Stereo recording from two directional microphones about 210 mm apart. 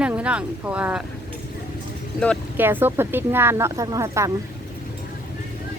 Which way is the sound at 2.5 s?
10° right (ahead or behind).